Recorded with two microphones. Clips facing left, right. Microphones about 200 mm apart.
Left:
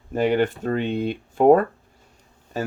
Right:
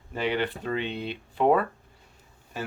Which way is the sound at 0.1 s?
45° left (ahead or behind).